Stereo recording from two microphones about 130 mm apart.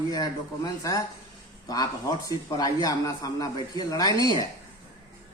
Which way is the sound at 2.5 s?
30° left (ahead or behind).